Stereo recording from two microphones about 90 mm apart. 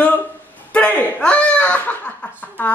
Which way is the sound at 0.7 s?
15° left (ahead or behind).